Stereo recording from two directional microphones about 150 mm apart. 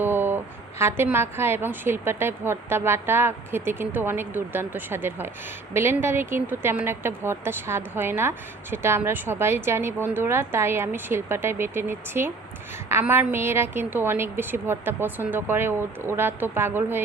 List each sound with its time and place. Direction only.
0.0 s a woman's voice: 15° right (ahead or behind)